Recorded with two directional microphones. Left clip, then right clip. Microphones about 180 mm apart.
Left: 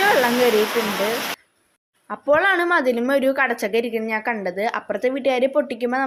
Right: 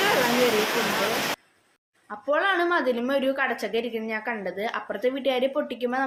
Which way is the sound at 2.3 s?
45° left (ahead or behind).